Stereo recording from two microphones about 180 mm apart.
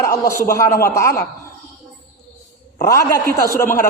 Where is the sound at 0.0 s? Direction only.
15° left (ahead or behind).